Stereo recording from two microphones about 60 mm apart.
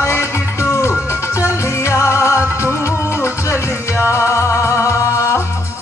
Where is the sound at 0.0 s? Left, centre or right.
Left.